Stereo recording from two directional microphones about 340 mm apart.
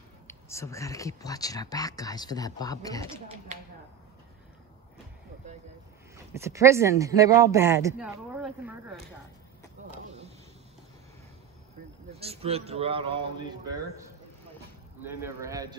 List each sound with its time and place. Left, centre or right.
0.3 s speech: centre
3.5 s speech: right
6.1 s speech: centre
12.1 s speech: centre
15.0 s speech: centre